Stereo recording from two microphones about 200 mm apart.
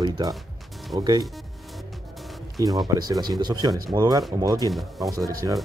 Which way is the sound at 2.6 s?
15° right (ahead or behind).